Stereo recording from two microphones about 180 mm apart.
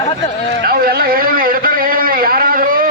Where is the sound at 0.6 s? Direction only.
55° right (ahead or behind).